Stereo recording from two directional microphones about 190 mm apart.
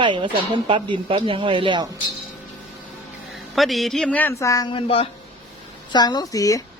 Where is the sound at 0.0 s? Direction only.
25° right (ahead or behind).